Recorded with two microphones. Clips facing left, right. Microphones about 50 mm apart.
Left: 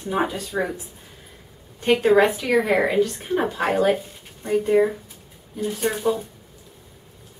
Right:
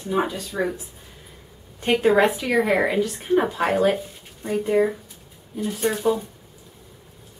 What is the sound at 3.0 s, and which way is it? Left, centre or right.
Speech, centre.